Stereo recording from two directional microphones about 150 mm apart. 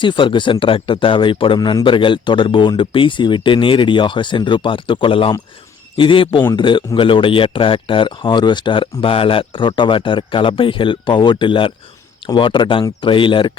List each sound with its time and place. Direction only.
0.0 s speech: 35° left (ahead or behind)